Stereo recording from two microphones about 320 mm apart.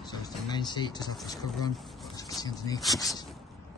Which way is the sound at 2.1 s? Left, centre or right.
Centre.